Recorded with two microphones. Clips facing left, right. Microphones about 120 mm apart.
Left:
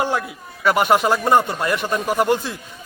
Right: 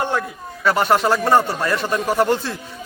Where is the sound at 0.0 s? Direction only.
10° left (ahead or behind).